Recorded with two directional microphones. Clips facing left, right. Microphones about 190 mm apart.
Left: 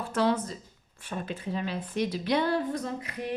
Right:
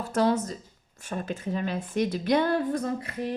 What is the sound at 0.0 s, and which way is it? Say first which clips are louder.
Speech: right 2 dB; 45° right (ahead or behind).